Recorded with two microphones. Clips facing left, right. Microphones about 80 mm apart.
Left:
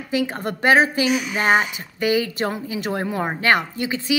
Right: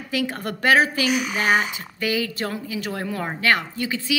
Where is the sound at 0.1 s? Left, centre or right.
Left.